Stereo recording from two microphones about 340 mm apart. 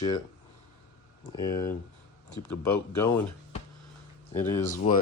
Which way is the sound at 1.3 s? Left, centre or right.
Centre.